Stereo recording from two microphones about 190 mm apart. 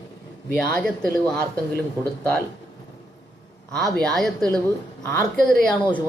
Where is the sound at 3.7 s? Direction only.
Centre (ahead or behind).